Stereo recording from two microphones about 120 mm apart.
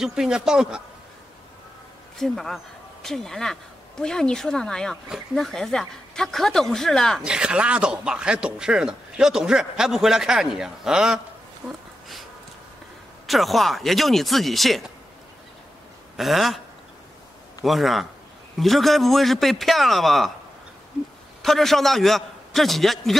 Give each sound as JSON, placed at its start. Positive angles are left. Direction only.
{"t": 0.0, "sound": "speech", "side_deg": -5}
{"t": 2.1, "sound": "speech", "side_deg": 0}
{"t": 7.2, "sound": "speech", "side_deg": -5}
{"t": 13.3, "sound": "speech", "side_deg": 0}
{"t": 16.2, "sound": "speech", "side_deg": 0}
{"t": 17.6, "sound": "speech", "side_deg": 0}
{"t": 21.4, "sound": "a man's voice", "side_deg": 0}